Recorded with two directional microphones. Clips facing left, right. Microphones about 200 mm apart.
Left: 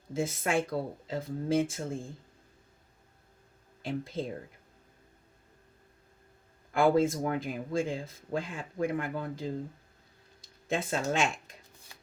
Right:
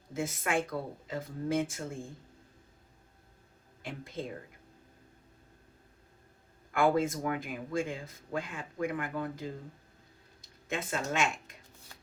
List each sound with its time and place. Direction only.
0.1 s speech: 30° left (ahead or behind)
3.8 s speech: 30° left (ahead or behind)
6.7 s speech: 30° left (ahead or behind)
10.7 s speech: 30° left (ahead or behind)